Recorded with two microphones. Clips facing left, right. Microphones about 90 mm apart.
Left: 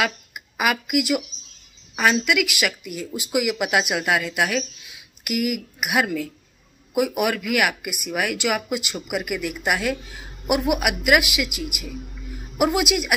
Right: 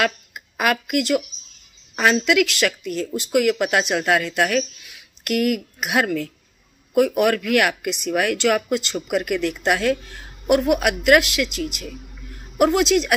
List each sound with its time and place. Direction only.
0.0 s speech: 5° left (ahead or behind)